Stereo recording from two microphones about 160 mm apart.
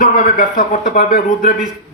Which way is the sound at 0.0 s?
60° left (ahead or behind).